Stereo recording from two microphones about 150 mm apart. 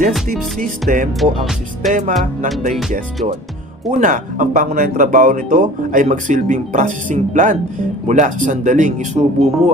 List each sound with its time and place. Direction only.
0.3 s speech: 65° right (ahead or behind)
1.2 s speech: centre (ahead or behind)
1.9 s speech: 55° right (ahead or behind)
4.0 s speech: 55° right (ahead or behind)